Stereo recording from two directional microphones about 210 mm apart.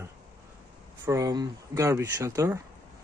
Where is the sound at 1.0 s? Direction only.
15° right (ahead or behind).